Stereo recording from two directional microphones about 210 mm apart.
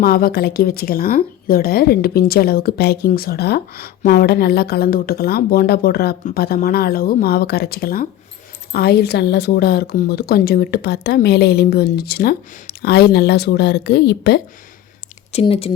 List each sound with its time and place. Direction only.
0.0 s speech: 45° left (ahead or behind)
15.3 s speech: 30° left (ahead or behind)